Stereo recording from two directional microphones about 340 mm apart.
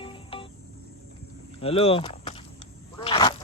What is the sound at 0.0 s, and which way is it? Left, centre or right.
Music, centre.